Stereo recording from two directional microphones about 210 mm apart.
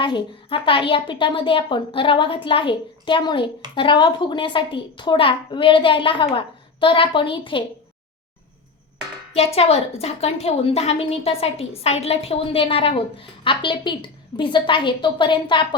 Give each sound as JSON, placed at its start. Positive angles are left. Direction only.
{"t": 0.0, "sound": "a woman's voice", "side_deg": 25}
{"t": 9.3, "sound": "a woman's voice", "side_deg": 30}